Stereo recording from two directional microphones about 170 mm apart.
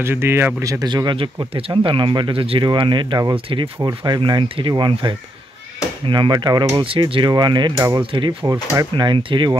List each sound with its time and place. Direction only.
0.0 s speech: 15° right (ahead or behind)
8.0 s speech: 30° right (ahead or behind)